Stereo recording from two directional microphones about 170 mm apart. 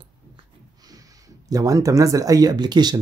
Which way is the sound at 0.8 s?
20° right (ahead or behind).